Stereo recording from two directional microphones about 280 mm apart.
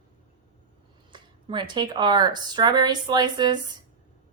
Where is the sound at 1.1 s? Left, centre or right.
Centre.